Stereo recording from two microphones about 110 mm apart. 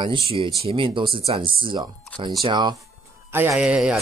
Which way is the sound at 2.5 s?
40° right (ahead or behind).